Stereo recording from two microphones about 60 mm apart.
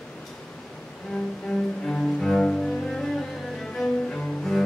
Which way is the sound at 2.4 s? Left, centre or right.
Centre.